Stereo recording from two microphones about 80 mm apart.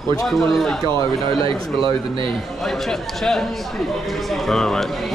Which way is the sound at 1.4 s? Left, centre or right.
Right.